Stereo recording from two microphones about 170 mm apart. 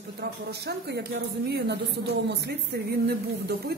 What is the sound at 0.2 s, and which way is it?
Speech, 75° right (ahead or behind).